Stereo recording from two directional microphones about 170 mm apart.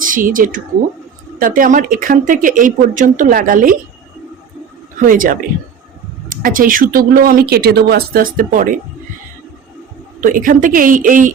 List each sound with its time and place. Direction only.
0.0 s speech: 55° right (ahead or behind)
5.0 s speech: 55° right (ahead or behind)
10.2 s speech: 50° right (ahead or behind)